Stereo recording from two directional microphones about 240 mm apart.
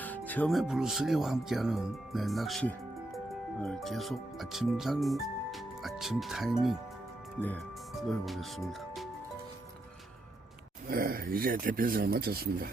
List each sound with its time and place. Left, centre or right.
0.0 s speech: centre
8.2 s speech: centre
10.8 s speech: right